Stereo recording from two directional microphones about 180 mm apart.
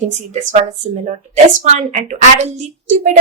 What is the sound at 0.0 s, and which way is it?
A woman's voice, 40° right (ahead or behind).